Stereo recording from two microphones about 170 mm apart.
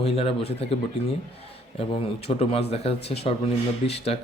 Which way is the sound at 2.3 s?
35° left (ahead or behind).